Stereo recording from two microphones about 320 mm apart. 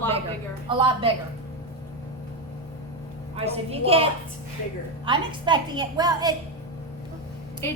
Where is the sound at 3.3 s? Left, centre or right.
Centre.